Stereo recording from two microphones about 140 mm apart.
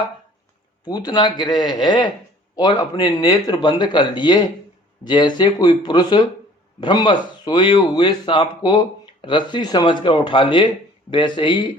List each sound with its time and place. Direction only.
0.9 s speech: 30° left (ahead or behind)